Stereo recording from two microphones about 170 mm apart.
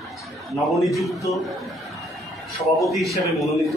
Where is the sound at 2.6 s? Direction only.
Centre (ahead or behind).